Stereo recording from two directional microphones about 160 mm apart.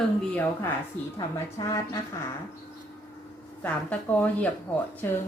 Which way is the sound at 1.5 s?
20° left (ahead or behind).